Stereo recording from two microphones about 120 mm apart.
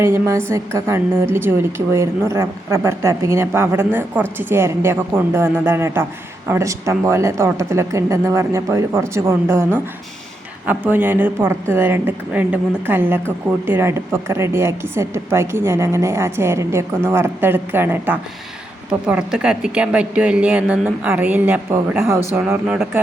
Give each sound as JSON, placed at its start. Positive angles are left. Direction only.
{"t": 0.0, "sound": "a woman's voice", "side_deg": -20}
{"t": 10.7, "sound": "a woman's voice", "side_deg": -15}
{"t": 18.9, "sound": "a woman's voice", "side_deg": -5}
{"t": 22.6, "sound": "a woman's voice", "side_deg": -5}